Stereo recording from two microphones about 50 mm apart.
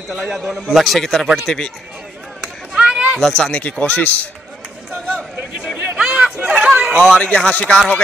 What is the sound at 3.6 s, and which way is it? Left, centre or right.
Speech, left.